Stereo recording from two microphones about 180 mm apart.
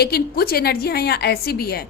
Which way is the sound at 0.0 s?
60° left (ahead or behind).